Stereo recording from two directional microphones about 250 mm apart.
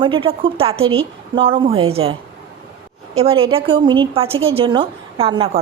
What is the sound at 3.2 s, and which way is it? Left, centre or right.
A woman's voice, right.